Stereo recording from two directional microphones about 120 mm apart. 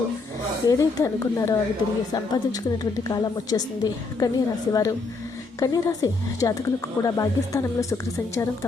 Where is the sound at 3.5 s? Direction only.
30° left (ahead or behind).